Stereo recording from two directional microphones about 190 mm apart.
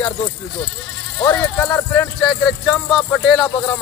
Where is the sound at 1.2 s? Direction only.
10° left (ahead or behind).